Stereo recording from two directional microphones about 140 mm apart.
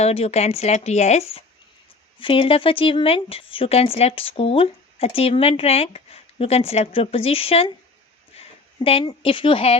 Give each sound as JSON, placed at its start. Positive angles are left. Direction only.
{"t": 0.0, "sound": "speech", "side_deg": 45}